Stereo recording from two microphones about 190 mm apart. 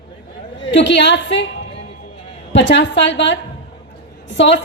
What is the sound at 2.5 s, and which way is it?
Speech, 70° left (ahead or behind).